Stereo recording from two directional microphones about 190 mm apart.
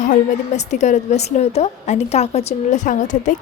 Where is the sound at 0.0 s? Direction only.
40° left (ahead or behind).